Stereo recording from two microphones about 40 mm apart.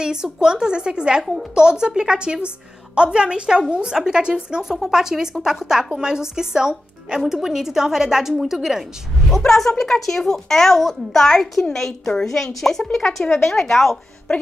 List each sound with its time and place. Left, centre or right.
0.0 s a woman's voice: centre
9.4 s a child's voice: centre
12.7 s speech: left
13.3 s a child's voice: centre